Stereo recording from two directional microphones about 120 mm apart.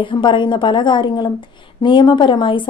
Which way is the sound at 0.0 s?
45° left (ahead or behind).